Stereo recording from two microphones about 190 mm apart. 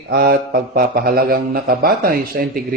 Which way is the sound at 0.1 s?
55° right (ahead or behind).